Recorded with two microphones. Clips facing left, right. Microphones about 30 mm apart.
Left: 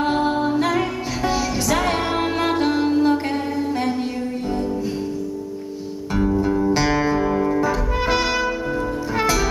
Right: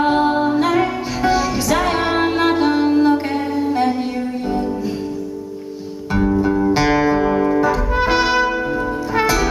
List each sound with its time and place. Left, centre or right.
0.0 s music: centre
6.1 s music: centre